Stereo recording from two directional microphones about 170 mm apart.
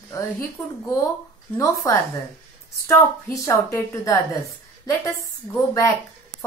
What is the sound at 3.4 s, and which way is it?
Speech, 20° left (ahead or behind).